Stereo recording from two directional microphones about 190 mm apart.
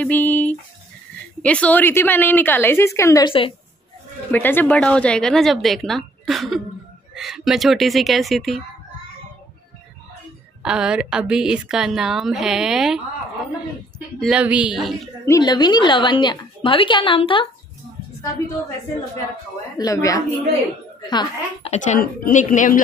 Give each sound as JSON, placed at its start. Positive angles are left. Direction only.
{"t": 0.0, "sound": "a woman's voice", "side_deg": 10}
{"t": 4.3, "sound": "a woman's voice", "side_deg": 10}
{"t": 10.6, "sound": "a woman's voice", "side_deg": -5}
{"t": 14.2, "sound": "a woman's voice", "side_deg": -5}
{"t": 15.2, "sound": "a woman's voice", "side_deg": 20}
{"t": 19.8, "sound": "a woman's voice", "side_deg": 15}
{"t": 21.8, "sound": "a woman's voice", "side_deg": 40}